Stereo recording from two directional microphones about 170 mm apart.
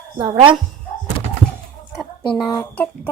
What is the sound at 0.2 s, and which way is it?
Speech, 30° right (ahead or behind).